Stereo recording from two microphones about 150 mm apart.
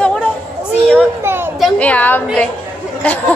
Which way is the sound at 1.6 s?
10° left (ahead or behind).